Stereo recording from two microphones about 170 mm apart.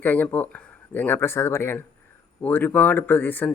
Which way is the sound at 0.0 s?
10° left (ahead or behind).